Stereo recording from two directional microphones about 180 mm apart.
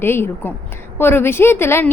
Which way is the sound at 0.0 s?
10° left (ahead or behind).